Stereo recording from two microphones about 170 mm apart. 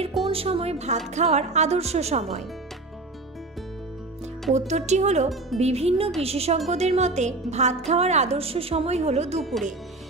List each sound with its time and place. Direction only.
0.3 s a woman's voice: 35° right (ahead or behind)
4.6 s a woman's voice: 45° right (ahead or behind)
9.4 s speech: centre (ahead or behind)